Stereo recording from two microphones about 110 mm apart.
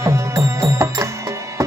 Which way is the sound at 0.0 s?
25° right (ahead or behind).